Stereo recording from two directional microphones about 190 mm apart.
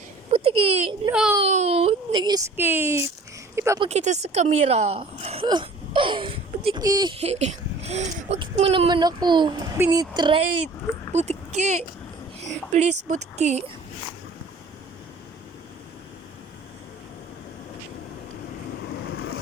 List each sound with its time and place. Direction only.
0.3 s a sound: 30° right (ahead or behind)
1.1 s a child's voice: 5° right (ahead or behind)
1.5 s a sound: 35° right (ahead or behind); by 3.8 s 15° right (ahead or behind)
3.8 s a woman's voice: 35° right (ahead or behind)
11.1 s a woman's voice: 35° right (ahead or behind)
19.0 s vehicle: 90° left